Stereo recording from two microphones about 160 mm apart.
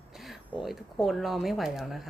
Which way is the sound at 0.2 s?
Centre (ahead or behind).